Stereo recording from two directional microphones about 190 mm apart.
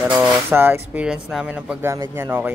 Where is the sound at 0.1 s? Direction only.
10° right (ahead or behind).